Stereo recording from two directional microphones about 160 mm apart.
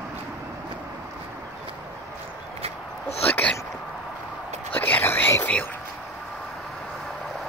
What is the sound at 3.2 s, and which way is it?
Speech, 10° left (ahead or behind).